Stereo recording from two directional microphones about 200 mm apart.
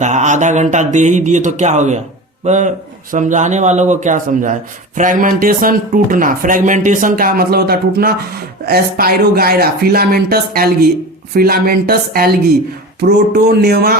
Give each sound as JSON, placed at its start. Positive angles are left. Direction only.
{"t": 0.0, "sound": "speech", "side_deg": -35}